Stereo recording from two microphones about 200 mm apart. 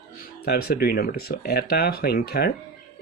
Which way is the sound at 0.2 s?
50° left (ahead or behind).